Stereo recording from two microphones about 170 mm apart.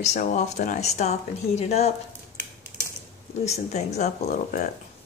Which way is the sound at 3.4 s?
40° left (ahead or behind).